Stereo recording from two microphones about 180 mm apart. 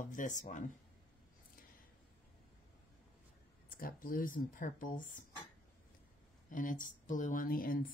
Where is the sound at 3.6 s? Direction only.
55° left (ahead or behind).